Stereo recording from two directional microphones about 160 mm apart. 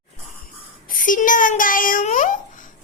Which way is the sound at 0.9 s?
55° left (ahead or behind).